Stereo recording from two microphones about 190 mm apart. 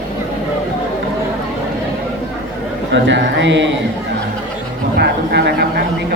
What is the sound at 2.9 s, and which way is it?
Speech, 70° right (ahead or behind).